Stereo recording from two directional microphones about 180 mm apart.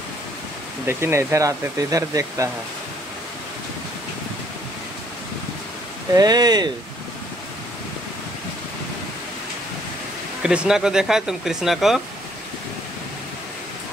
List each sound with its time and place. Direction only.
0.8 s speech: 15° right (ahead or behind)
6.1 s speech: 20° right (ahead or behind)
10.4 s speech: 5° right (ahead or behind)